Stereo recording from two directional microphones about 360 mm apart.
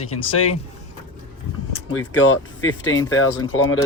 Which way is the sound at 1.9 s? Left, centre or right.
Left.